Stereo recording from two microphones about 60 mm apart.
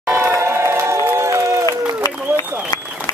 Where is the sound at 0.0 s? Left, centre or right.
Right.